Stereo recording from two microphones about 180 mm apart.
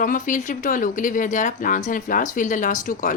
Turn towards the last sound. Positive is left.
turn(degrees=45)  # may be behind; listen again after turning